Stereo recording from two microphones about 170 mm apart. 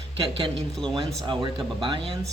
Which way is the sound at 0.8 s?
Centre (ahead or behind).